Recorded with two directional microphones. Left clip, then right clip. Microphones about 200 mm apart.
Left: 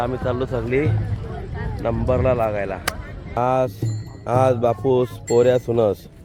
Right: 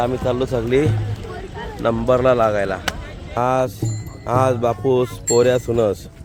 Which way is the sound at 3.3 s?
5° left (ahead or behind).